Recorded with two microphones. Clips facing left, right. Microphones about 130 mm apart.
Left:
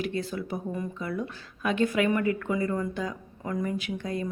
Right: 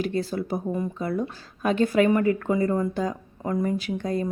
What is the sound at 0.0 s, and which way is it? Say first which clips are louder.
Speech: right 4 dB; 35° right (ahead or behind).